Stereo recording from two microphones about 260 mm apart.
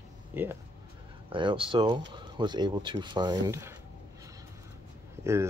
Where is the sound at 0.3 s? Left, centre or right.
Centre.